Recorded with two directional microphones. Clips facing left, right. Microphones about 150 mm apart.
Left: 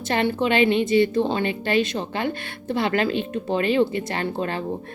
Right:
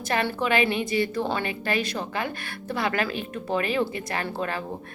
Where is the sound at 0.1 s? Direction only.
25° left (ahead or behind).